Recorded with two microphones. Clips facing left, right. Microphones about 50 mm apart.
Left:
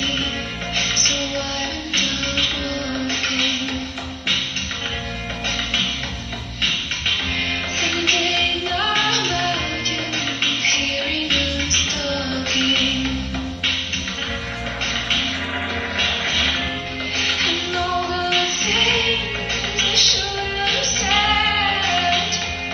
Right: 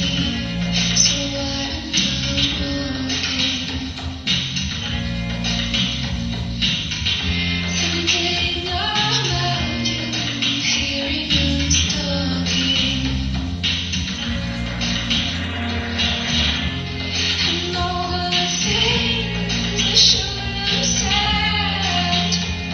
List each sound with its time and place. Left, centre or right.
0.7 s music: left
7.8 s music: left
11.3 s music: left
16.0 s music: left